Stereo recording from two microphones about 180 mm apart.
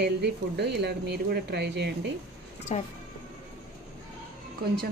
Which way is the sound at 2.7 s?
40° left (ahead or behind).